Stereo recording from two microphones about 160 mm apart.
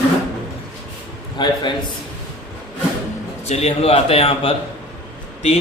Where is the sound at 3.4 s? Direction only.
40° left (ahead or behind).